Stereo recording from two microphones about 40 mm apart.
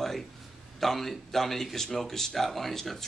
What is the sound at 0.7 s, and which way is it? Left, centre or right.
Speech, centre.